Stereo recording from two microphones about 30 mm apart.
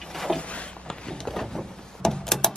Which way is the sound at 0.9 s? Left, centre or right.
Left.